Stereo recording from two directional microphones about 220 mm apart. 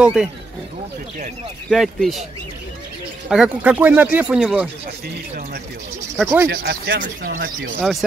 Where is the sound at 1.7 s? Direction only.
Centre (ahead or behind).